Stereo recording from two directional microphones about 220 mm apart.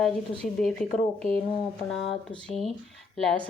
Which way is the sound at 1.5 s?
25° left (ahead or behind).